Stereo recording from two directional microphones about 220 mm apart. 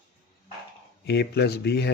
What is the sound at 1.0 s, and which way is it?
Speech, 50° left (ahead or behind).